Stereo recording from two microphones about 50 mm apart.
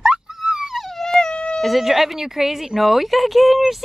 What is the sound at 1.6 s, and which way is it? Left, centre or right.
Speech, centre.